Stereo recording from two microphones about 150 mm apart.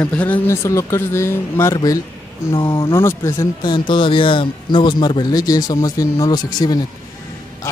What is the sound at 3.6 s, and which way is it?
Speech, 30° left (ahead or behind).